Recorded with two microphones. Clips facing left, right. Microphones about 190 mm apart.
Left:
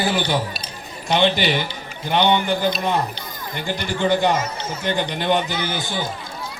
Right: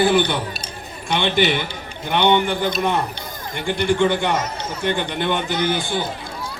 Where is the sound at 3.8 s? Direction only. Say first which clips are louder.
Right 2 dB; 60° right (ahead or behind).